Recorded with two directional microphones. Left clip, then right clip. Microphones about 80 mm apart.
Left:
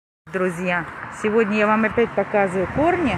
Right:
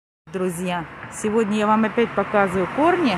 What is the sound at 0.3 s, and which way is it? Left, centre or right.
Speech, right.